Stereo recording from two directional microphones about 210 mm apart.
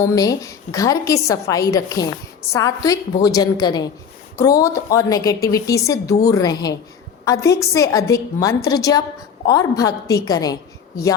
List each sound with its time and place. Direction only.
0.0 s a woman's voice: 15° left (ahead or behind)